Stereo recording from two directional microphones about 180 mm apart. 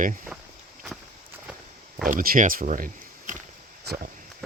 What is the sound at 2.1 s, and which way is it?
Speech, 50° right (ahead or behind).